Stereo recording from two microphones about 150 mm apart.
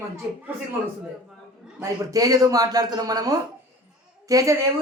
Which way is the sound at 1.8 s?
25° right (ahead or behind).